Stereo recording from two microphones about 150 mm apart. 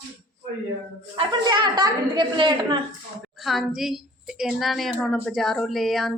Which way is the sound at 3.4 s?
Centre (ahead or behind).